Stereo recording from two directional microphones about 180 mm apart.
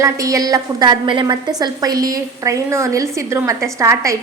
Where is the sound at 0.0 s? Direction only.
20° right (ahead or behind).